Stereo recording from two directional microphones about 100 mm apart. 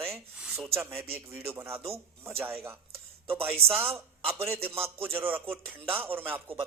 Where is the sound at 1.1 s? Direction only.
20° right (ahead or behind).